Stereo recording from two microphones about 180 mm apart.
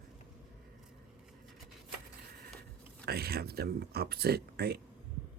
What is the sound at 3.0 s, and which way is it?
Speech, 60° right (ahead or behind).